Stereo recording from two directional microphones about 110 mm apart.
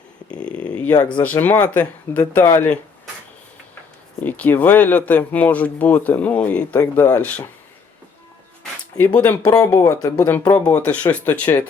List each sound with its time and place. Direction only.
0.3 s a sound: 10° left (ahead or behind)
1.2 s speech: 15° left (ahead or behind)
4.2 s speech: 15° left (ahead or behind)
9.0 s speech: 15° left (ahead or behind)
9.4 s speech: 30° left (ahead or behind)